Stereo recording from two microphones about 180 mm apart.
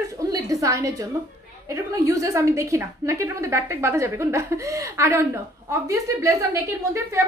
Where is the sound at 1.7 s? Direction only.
15° right (ahead or behind).